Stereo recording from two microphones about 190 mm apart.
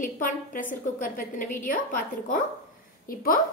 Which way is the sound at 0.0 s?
45° left (ahead or behind).